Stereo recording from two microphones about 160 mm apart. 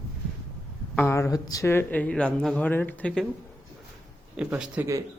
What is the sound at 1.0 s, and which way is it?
Speech, 15° left (ahead or behind).